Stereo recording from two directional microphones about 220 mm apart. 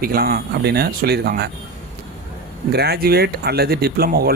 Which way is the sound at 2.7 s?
45° right (ahead or behind).